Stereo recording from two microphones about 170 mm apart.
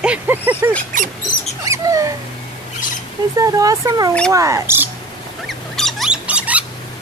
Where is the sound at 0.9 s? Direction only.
50° right (ahead or behind).